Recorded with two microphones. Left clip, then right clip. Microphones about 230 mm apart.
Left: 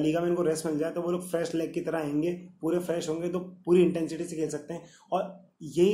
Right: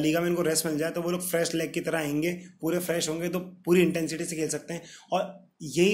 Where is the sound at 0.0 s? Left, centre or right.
Right.